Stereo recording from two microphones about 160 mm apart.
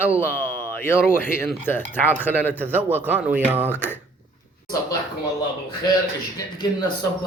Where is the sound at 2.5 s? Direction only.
10° right (ahead or behind).